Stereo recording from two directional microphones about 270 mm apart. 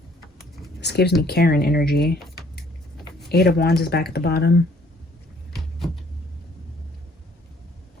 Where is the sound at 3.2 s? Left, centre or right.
Left.